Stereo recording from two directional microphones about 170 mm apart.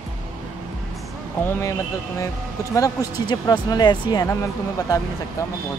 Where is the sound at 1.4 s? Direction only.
15° left (ahead or behind).